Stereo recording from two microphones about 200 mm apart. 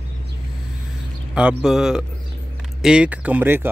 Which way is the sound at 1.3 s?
5° right (ahead or behind).